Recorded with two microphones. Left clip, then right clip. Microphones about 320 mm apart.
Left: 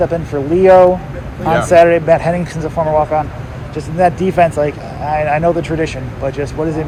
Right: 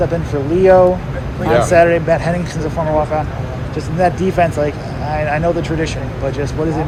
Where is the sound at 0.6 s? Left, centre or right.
Left.